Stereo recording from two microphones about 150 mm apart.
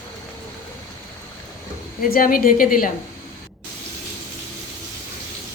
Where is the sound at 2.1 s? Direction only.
70° left (ahead or behind).